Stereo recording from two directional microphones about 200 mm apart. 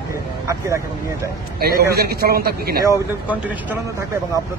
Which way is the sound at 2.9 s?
10° right (ahead or behind).